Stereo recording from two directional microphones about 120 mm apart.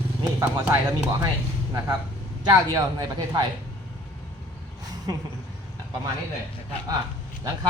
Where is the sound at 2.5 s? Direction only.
30° right (ahead or behind).